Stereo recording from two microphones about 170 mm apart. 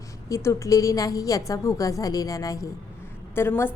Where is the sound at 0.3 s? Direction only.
20° left (ahead or behind).